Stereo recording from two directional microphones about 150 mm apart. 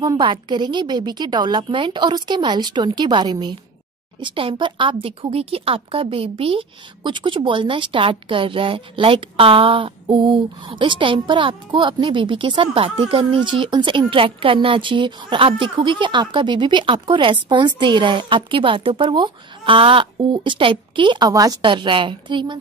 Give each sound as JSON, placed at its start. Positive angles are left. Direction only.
{"t": 0.0, "sound": "a woman's voice", "side_deg": -30}